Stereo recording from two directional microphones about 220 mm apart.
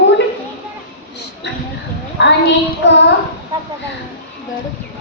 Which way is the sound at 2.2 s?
55° left (ahead or behind).